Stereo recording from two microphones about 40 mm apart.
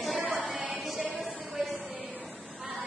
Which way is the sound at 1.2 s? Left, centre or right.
Centre.